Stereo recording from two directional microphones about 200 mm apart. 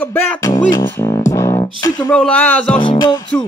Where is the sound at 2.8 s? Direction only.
25° left (ahead or behind).